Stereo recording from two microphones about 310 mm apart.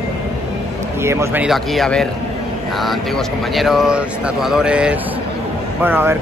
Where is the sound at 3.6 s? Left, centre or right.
Centre.